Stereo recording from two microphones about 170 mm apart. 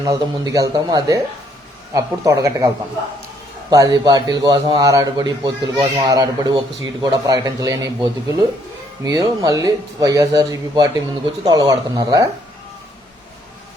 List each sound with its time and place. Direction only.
0.0 s speech: 20° right (ahead or behind)
3.7 s speech: 20° right (ahead or behind)